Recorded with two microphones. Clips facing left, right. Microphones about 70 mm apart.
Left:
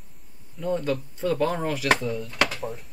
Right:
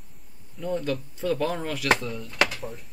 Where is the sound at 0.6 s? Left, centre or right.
Centre.